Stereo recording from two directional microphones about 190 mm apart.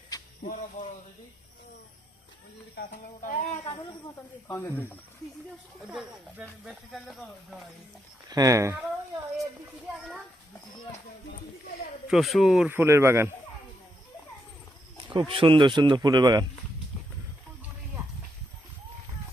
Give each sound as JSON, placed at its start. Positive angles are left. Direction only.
{"t": 0.1, "sound": "a sound", "side_deg": 20}
{"t": 0.4, "sound": "a sound", "side_deg": 40}
{"t": 2.7, "sound": "speech", "side_deg": 45}
{"t": 4.4, "sound": "speech", "side_deg": 10}
{"t": 5.8, "sound": "speech", "side_deg": 0}
{"t": 8.3, "sound": "a man's voice", "side_deg": -20}
{"t": 12.0, "sound": "a man's voice", "side_deg": 0}
{"t": 15.1, "sound": "speech", "side_deg": -25}